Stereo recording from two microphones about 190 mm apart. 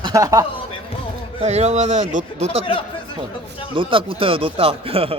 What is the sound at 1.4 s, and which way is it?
Speech, 35° right (ahead or behind).